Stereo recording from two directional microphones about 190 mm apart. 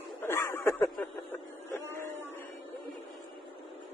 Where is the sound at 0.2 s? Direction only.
10° left (ahead or behind).